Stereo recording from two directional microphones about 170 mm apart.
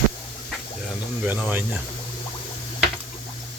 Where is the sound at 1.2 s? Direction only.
10° right (ahead or behind).